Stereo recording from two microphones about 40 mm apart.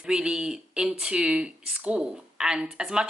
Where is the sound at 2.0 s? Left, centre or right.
Centre.